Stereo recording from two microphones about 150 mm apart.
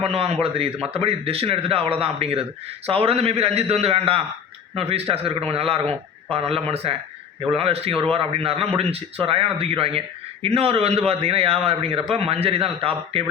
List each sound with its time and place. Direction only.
0.0 s a man's voice: 40° right (ahead or behind)